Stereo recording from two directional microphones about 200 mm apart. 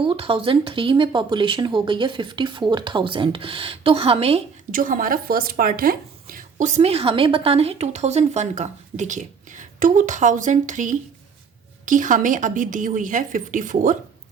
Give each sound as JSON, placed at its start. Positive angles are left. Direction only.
{"t": 0.0, "sound": "speech", "side_deg": -25}
{"t": 4.7, "sound": "speech", "side_deg": -45}